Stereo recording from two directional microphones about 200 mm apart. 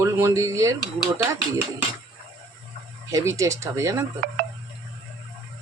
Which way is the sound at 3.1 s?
15° right (ahead or behind).